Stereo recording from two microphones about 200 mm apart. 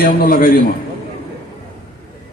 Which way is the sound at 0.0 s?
45° left (ahead or behind).